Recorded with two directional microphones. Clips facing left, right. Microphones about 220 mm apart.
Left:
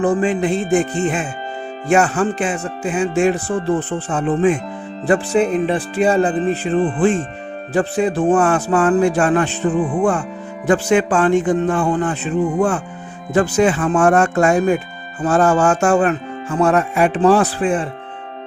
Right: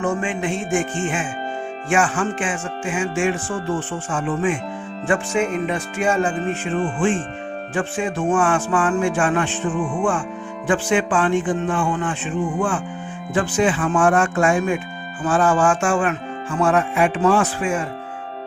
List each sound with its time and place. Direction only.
0.0 s speech: 35° left (ahead or behind)